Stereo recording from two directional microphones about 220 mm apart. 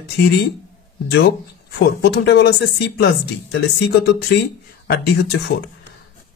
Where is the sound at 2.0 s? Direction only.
50° left (ahead or behind).